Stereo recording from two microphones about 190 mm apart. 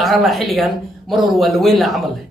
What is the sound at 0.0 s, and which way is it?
Speech, centre (ahead or behind).